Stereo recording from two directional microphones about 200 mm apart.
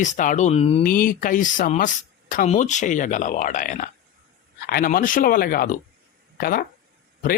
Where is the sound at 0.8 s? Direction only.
45° left (ahead or behind).